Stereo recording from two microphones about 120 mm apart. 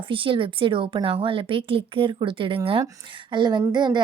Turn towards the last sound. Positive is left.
turn(degrees=-40)  # may be behind; listen again after turning